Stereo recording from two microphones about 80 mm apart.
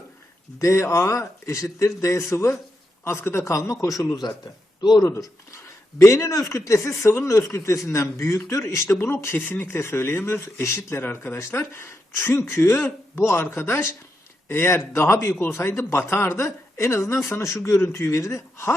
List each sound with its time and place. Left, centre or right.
0.6 s a man's voice: left
4.8 s speech: left
5.0 s speech: left